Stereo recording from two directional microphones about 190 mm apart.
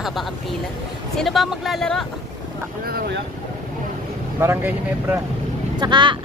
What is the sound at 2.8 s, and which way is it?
Boat, 55° right (ahead or behind).